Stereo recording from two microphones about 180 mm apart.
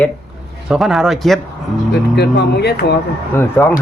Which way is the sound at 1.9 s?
65° left (ahead or behind).